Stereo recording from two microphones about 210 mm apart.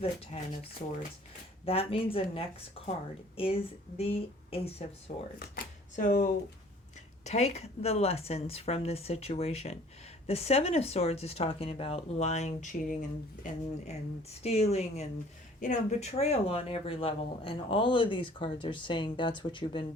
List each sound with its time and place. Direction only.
1.6 s speech: 25° left (ahead or behind)
5.4 s speech: 40° left (ahead or behind); by 19.8 s 25° left (ahead or behind)